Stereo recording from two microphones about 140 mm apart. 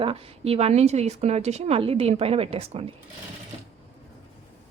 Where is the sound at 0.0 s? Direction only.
45° right (ahead or behind).